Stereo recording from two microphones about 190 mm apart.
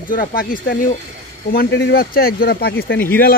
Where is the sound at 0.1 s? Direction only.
50° left (ahead or behind).